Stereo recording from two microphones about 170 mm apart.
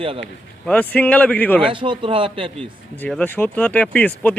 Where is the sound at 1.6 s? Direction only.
30° right (ahead or behind).